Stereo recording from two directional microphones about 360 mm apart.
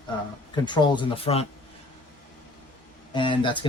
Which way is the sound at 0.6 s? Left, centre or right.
Centre.